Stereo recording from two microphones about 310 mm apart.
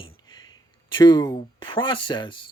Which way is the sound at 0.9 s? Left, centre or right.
Centre.